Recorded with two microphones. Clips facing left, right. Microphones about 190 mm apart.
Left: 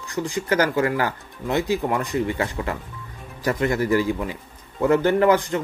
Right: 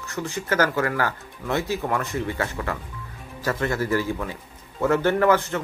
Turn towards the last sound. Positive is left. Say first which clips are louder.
# left 2 dB
turn(degrees=15)  # may be behind; listen again after turning